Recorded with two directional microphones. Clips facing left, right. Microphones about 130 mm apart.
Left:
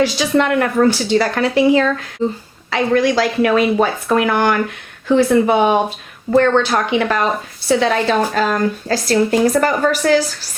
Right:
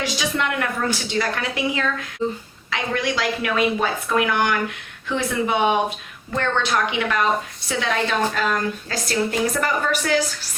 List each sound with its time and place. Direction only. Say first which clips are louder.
0.0 s speech: left 10 dB; 35° left (ahead or behind)
0.4 s speech: left 9 dB; 45° left (ahead or behind)